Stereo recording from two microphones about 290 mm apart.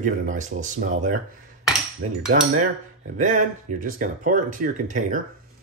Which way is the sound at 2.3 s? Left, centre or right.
Right.